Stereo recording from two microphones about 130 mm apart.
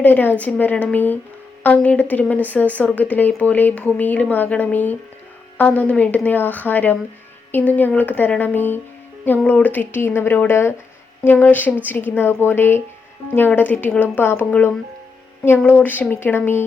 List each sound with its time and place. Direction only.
0.0 s a woman's voice: 15° left (ahead or behind)